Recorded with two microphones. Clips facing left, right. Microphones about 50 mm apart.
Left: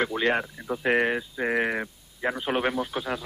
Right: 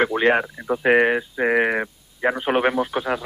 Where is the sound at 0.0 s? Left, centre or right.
Right.